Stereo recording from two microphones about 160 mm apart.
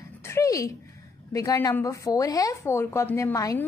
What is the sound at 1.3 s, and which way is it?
A woman's voice, 20° left (ahead or behind).